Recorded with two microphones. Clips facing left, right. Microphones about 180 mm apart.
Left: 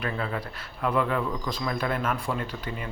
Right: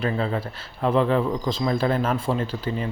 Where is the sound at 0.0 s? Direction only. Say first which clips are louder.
Right 6 dB; 30° right (ahead or behind).